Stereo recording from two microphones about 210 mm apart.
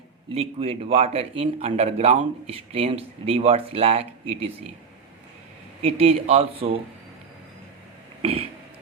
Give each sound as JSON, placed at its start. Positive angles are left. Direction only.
{"t": 0.3, "sound": "speech", "side_deg": -30}
{"t": 5.8, "sound": "speech", "side_deg": -30}
{"t": 8.2, "sound": "throat clearing", "side_deg": -30}